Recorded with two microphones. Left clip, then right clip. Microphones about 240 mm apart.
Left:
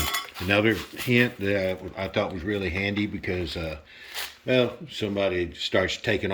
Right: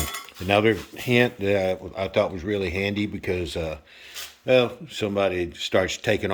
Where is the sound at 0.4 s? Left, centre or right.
Centre.